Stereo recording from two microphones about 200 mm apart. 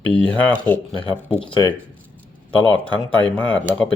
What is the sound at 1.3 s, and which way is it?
Speech, 25° left (ahead or behind).